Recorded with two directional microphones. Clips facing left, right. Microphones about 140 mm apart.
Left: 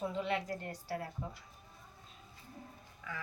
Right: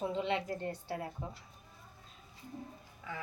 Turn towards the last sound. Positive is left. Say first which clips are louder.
# right 2 dB
turn(degrees=-25)  # may be behind; listen again after turning